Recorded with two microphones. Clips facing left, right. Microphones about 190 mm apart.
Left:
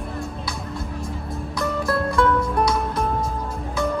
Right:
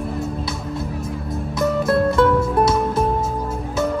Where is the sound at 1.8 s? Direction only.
25° right (ahead or behind).